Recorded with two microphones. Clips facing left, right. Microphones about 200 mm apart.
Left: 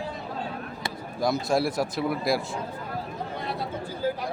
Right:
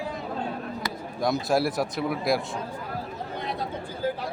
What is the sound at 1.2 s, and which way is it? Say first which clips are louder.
Speech: even; centre (ahead or behind).